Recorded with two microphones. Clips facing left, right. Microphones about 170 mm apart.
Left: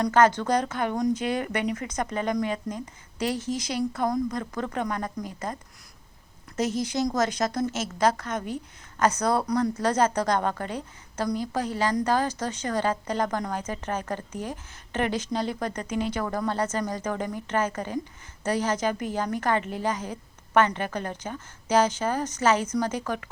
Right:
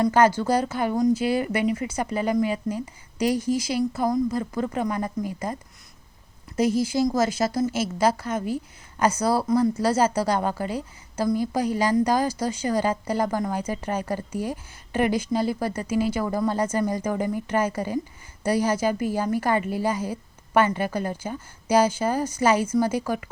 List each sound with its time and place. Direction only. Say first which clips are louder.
0.0 s a woman's voice: right 2 dB; 10° right (ahead or behind)
6.6 s a woman's voice: right 5 dB; 10° right (ahead or behind)